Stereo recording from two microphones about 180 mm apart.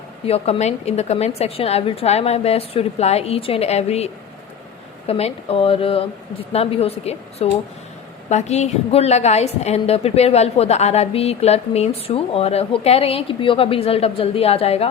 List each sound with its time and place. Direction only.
0.3 s a woman's voice: 35° left (ahead or behind)